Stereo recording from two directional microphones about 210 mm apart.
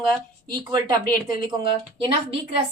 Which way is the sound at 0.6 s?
20° right (ahead or behind).